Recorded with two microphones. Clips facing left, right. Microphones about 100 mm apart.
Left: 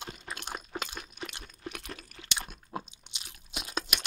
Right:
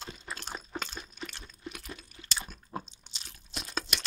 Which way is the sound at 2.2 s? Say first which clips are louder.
Left 1 dB; 90° left.